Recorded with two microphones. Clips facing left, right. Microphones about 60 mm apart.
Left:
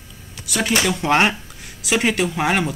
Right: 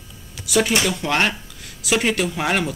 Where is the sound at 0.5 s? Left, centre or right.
Centre.